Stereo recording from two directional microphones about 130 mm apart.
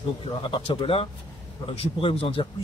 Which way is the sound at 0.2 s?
45° left (ahead or behind).